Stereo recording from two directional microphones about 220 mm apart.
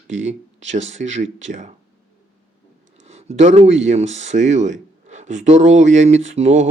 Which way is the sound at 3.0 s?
30° right (ahead or behind).